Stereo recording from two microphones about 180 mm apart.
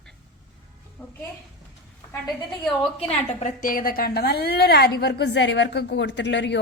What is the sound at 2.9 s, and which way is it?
A woman's voice, 40° left (ahead or behind).